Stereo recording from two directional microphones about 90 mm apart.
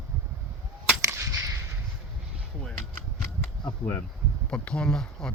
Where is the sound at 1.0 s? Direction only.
35° right (ahead or behind).